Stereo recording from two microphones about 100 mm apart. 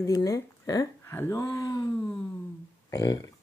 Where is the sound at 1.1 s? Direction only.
25° left (ahead or behind).